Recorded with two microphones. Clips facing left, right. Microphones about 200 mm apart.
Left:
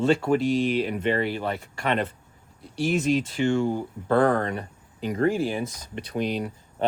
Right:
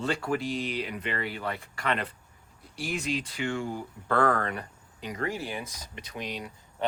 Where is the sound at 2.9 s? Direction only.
45° left (ahead or behind).